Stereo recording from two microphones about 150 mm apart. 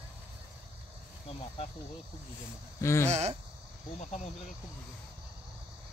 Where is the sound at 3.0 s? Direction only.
45° right (ahead or behind).